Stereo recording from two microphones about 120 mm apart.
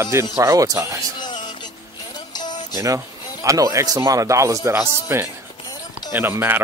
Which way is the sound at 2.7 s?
30° right (ahead or behind).